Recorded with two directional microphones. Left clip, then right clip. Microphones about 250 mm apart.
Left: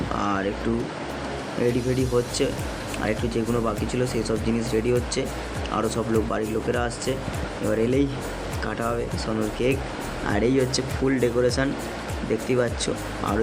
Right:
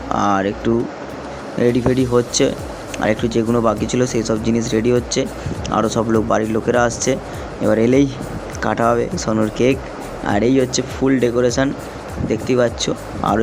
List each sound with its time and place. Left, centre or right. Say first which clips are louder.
0.1 s speech: right 10 dB; centre
1.6 s speech: right 8 dB; centre